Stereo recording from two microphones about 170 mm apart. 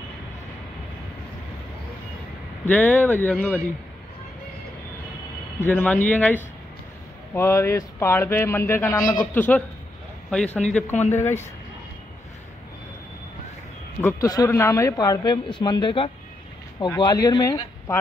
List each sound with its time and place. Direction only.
2.6 s speech: 10° left (ahead or behind)
5.6 s speech: 10° left (ahead or behind)
10.9 s speech: 40° left (ahead or behind)
11.1 s speech: 15° left (ahead or behind)
14.0 s speech: 20° left (ahead or behind)